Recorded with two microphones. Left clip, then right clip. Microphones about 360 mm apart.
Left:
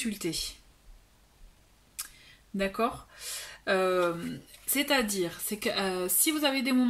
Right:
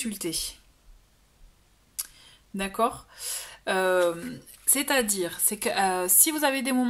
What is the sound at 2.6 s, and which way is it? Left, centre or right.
Speech, centre.